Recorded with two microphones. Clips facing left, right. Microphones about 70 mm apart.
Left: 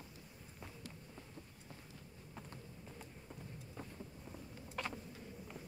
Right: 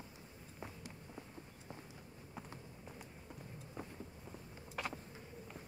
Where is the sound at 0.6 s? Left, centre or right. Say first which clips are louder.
Right 2 dB; centre.